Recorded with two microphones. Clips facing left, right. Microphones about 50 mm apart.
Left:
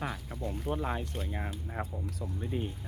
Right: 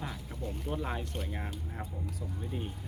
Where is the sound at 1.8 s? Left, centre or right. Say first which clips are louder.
Left 7 dB; left.